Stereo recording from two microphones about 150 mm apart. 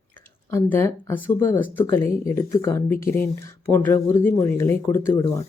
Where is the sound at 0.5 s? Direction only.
15° left (ahead or behind).